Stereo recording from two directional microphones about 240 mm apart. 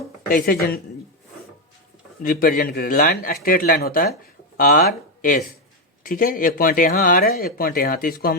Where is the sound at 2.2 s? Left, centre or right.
Left.